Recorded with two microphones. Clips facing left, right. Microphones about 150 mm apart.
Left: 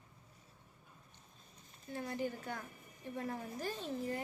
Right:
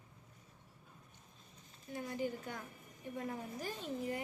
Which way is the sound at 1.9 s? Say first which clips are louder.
Even; 15° right (ahead or behind).